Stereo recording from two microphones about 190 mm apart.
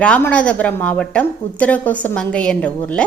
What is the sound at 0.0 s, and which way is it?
A woman's voice, 5° left (ahead or behind).